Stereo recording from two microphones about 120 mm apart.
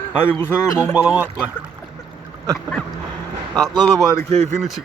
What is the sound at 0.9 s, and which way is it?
Speech, 10° right (ahead or behind).